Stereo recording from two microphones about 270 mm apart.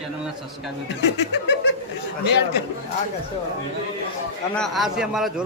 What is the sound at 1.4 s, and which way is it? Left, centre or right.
Chuckle, left.